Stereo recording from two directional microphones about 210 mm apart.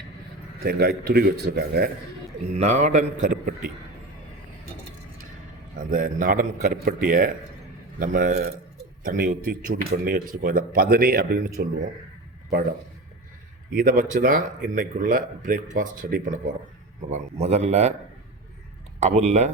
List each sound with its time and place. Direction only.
0.6 s speech: 45° right (ahead or behind)
2.6 s speech: 35° right (ahead or behind)
5.7 s speech: 40° right (ahead or behind)
13.7 s speech: 40° right (ahead or behind)
18.9 s speech: 30° right (ahead or behind)